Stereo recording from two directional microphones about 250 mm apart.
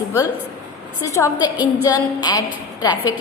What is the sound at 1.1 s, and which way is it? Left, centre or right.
A woman's voice, centre.